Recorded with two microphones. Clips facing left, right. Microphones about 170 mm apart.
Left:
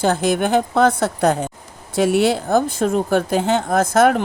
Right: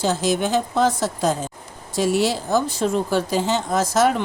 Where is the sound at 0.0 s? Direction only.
55° left (ahead or behind).